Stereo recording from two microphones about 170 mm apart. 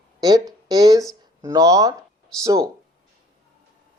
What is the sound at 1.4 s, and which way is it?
Speech, 20° right (ahead or behind).